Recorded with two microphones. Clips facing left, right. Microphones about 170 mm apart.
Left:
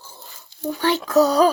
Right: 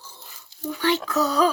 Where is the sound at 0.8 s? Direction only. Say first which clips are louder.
Left 5 dB; 40° left (ahead or behind).